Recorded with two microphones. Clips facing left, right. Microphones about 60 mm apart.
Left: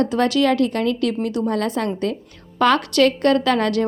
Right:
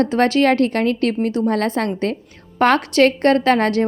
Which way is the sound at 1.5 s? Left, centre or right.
Right.